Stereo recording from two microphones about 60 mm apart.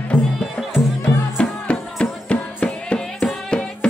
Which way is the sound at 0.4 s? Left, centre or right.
Centre.